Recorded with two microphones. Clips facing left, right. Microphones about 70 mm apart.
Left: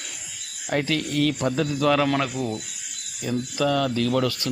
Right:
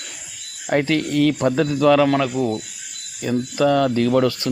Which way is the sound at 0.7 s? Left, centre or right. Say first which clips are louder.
Right 6 dB; right.